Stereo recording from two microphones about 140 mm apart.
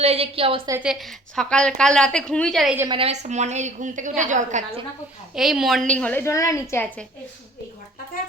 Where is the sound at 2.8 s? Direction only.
35° right (ahead or behind).